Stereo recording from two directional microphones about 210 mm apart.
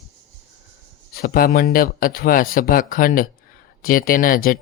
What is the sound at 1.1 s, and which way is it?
Speech, 45° left (ahead or behind).